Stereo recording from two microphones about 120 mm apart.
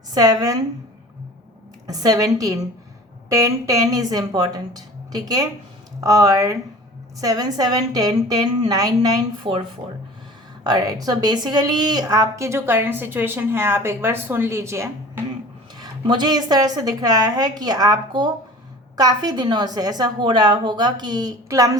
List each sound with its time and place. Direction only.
0.1 s a woman's voice: 30° right (ahead or behind)
1.9 s a woman's voice: 30° right (ahead or behind)
9.4 s speech: 45° right (ahead or behind)
10.7 s a woman's voice: 30° right (ahead or behind)
15.8 s a woman's voice: 35° right (ahead or behind)